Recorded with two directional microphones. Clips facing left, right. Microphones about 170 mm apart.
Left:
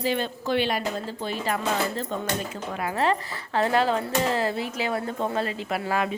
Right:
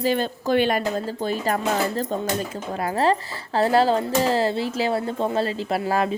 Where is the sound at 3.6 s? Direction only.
35° right (ahead or behind).